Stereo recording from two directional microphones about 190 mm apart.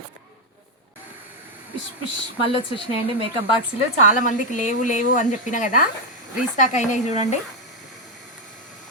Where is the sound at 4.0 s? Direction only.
40° left (ahead or behind).